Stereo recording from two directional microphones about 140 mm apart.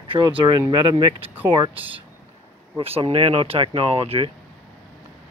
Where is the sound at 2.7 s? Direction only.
40° right (ahead or behind).